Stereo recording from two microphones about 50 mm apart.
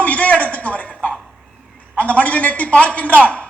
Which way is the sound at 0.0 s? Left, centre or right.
Left.